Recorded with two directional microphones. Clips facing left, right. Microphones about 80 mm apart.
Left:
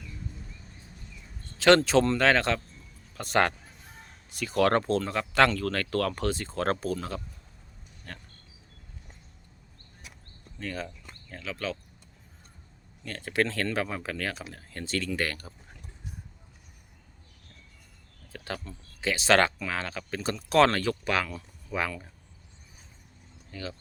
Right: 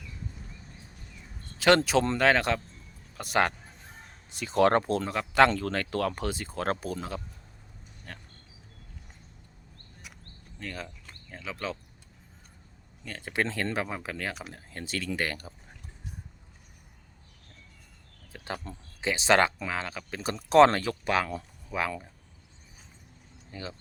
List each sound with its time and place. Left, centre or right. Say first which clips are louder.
1.5 s speech: left 2 dB; centre
4.3 s speech: right 1 dB; right; by 8.2 s centre
10.6 s speech: left 3 dB; centre
11.3 s speech: left 1 dB; centre
13.1 s speech: left 3 dB; centre
18.3 s speech: even; centre
20.3 s speech: right 3 dB; right; by 21.9 s centre
23.5 s speech: left 1 dB; right